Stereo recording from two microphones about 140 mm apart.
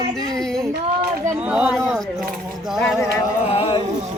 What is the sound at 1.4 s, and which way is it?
Speech, 10° right (ahead or behind).